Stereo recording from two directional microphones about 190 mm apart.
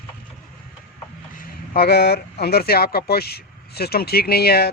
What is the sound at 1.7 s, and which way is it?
Speech, 55° left (ahead or behind).